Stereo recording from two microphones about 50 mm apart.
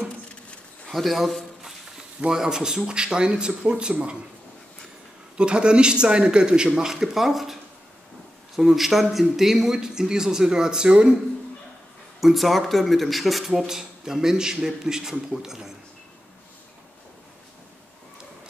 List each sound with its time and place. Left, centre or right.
0.8 s a sound: centre
2.2 s speech: centre
5.4 s speech: centre
8.5 s speech: centre
12.2 s speech: centre